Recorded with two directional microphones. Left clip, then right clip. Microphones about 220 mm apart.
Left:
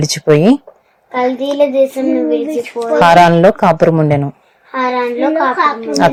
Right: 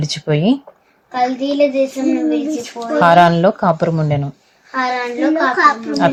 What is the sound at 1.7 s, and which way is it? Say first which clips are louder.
Speech: left 4 dB; 15° left (ahead or behind).